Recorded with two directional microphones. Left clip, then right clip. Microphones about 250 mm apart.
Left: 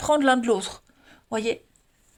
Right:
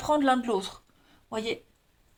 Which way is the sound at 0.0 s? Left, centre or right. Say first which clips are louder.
Left 4 dB; left.